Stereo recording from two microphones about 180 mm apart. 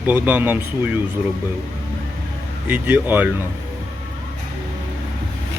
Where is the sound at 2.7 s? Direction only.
10° right (ahead or behind).